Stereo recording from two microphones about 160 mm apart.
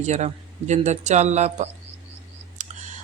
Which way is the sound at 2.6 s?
50° right (ahead or behind).